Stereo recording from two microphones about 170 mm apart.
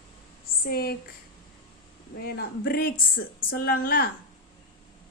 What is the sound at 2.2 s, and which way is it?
A woman's voice, 60° left (ahead or behind).